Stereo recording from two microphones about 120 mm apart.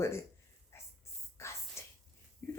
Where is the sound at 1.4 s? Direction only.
25° left (ahead or behind).